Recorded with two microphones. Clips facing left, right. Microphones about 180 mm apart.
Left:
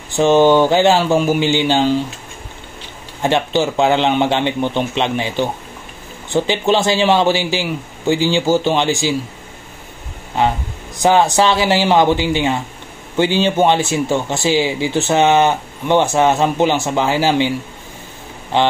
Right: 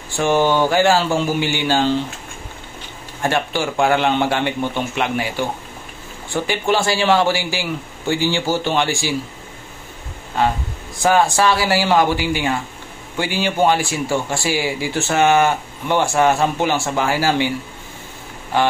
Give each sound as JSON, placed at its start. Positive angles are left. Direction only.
{"t": 0.1, "sound": "speech", "side_deg": 20}
{"t": 3.2, "sound": "speech", "side_deg": 20}
{"t": 10.4, "sound": "speech", "side_deg": 20}
{"t": 18.5, "sound": "speech", "side_deg": 20}